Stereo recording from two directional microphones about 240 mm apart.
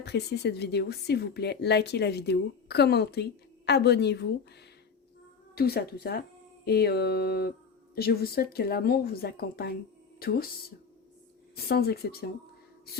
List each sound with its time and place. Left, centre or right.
0.0 s a woman's voice: left
5.5 s speech: left
11.5 s speech: left